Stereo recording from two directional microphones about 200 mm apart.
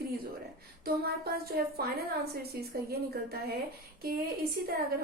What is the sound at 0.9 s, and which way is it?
A woman's voice, 50° right (ahead or behind).